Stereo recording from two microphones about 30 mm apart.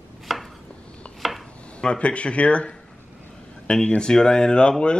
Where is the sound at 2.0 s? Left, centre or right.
Left.